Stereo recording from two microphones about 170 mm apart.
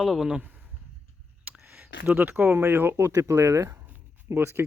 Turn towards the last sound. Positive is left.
turn(degrees=-15)  # may be behind; listen again after turning